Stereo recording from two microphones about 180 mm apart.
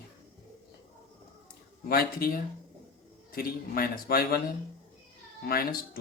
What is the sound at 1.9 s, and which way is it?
A man's voice, 55° left (ahead or behind).